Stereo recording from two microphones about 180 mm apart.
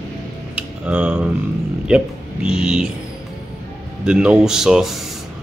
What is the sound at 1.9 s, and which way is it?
A man's voice, 5° right (ahead or behind).